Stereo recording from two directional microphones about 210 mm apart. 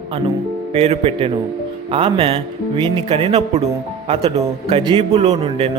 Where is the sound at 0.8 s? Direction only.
30° right (ahead or behind).